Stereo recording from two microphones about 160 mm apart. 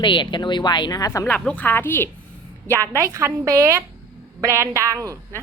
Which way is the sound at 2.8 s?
20° right (ahead or behind).